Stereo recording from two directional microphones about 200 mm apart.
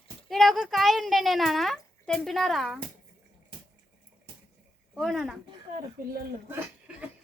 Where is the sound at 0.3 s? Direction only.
Centre (ahead or behind).